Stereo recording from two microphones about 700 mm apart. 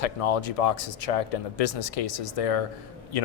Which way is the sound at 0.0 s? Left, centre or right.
Left.